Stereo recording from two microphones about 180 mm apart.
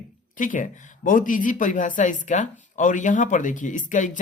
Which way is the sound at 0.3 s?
45° left (ahead or behind).